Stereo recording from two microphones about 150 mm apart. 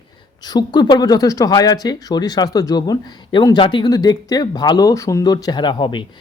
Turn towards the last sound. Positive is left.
turn(degrees=30)  # may be behind; listen again after turning